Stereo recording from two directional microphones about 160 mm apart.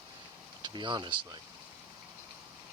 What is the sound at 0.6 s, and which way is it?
Speech, 30° right (ahead or behind).